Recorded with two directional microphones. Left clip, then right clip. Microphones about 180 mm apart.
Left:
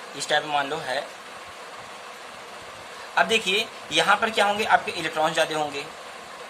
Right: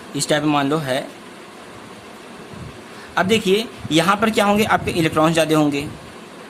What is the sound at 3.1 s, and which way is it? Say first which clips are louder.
Speech: right 4 dB; 30° right (ahead or behind).